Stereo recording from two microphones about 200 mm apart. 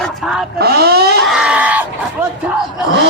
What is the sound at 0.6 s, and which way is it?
Speech, 50° right (ahead or behind).